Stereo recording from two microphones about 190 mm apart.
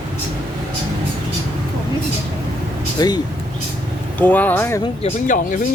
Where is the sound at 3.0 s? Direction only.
20° left (ahead or behind).